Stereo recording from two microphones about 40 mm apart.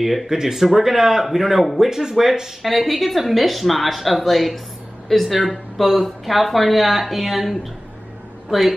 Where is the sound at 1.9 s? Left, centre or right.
Centre.